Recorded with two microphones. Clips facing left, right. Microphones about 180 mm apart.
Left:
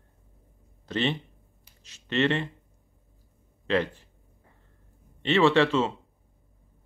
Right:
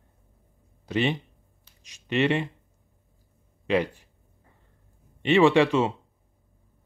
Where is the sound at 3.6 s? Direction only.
15° right (ahead or behind).